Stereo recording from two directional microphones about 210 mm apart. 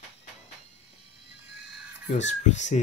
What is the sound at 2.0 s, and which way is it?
Speech, 35° left (ahead or behind).